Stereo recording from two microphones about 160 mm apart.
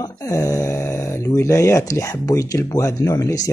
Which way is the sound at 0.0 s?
20° left (ahead or behind).